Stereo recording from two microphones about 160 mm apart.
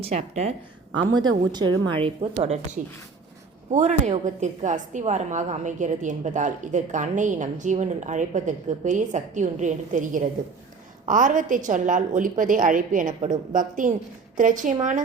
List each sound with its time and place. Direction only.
0.0 s a woman's voice: 45° right (ahead or behind)
1.0 s speech: 25° right (ahead or behind)
2.8 s a woman's voice: 55° right (ahead or behind)